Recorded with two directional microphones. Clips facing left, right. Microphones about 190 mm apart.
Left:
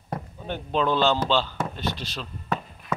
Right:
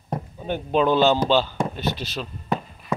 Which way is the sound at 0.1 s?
15° right (ahead or behind).